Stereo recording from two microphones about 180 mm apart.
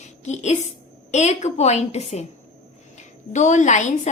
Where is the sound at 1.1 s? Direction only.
40° left (ahead or behind).